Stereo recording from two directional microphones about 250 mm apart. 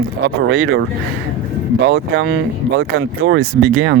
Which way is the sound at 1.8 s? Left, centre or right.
Right.